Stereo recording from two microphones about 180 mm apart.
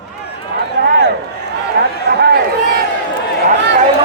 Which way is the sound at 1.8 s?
70° right (ahead or behind).